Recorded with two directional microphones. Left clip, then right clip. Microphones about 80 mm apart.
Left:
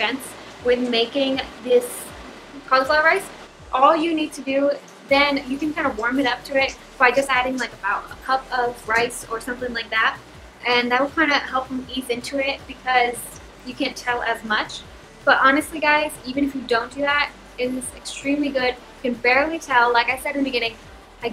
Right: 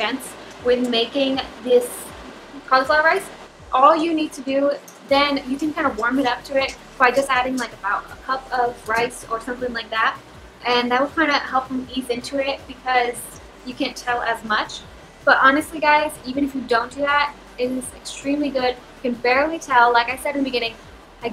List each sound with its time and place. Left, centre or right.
0.7 s a woman's voice: centre